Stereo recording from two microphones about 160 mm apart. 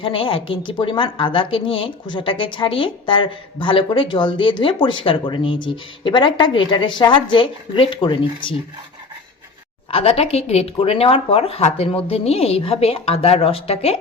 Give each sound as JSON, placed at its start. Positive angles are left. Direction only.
{"t": 0.0, "sound": "speech", "side_deg": 35}
{"t": 9.9, "sound": "speech", "side_deg": 40}